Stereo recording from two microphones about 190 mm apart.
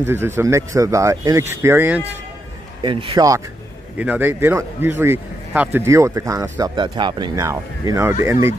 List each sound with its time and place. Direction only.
0.0 s a man's voice: 10° right (ahead or behind)
2.8 s a man's voice: 25° right (ahead or behind)